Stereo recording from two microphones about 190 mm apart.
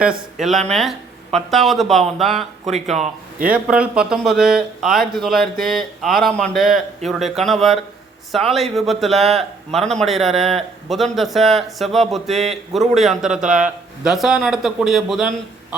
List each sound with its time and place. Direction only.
0.4 s speech: centre (ahead or behind)
2.8 s a man's voice: 35° right (ahead or behind)
3.5 s speech: 5° right (ahead or behind)